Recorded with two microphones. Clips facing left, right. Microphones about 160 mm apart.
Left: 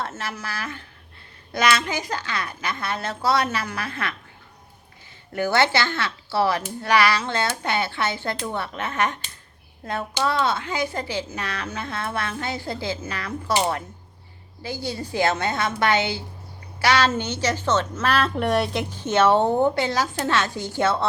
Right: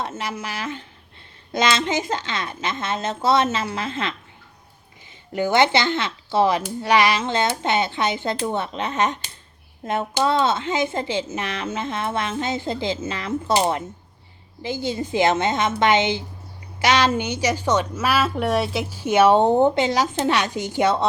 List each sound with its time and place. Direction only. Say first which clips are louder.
0.0 s a woman's voice: right 3 dB; 15° right (ahead or behind)
5.3 s a woman's voice: right 3 dB; 20° right (ahead or behind)